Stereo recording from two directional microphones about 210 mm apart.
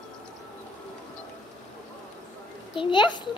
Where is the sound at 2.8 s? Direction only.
20° left (ahead or behind).